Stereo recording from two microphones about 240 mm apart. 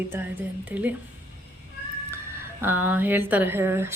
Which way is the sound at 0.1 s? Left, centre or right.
Centre.